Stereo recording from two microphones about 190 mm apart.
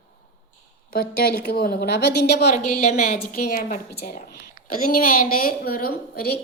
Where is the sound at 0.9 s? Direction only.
50° left (ahead or behind).